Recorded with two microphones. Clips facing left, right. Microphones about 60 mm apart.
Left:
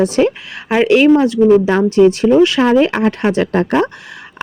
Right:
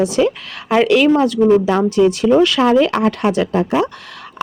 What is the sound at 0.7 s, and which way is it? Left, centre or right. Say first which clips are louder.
A woman's voice: left 2 dB; left.